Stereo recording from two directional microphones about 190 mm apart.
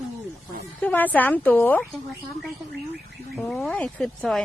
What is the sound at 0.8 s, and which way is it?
Speech, 10° left (ahead or behind).